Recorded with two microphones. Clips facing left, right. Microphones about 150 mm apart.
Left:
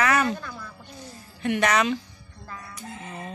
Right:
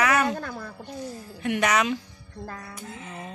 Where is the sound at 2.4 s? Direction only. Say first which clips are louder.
Right 1 dB; 55° right (ahead or behind).